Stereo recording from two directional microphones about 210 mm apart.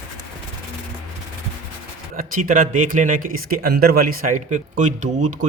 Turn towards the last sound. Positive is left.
turn(degrees=-35)  # may be behind; listen again after turning